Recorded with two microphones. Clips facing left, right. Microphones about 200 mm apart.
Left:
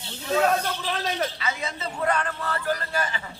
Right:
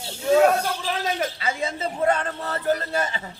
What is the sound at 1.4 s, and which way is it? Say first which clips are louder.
A man's voice: right 4 dB; 30° right (ahead or behind).